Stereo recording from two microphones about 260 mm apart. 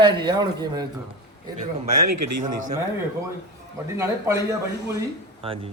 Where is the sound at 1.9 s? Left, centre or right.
Right.